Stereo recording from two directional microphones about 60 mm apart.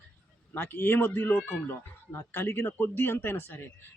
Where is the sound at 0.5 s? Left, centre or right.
Left.